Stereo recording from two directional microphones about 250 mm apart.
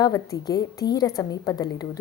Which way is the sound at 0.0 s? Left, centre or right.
Centre.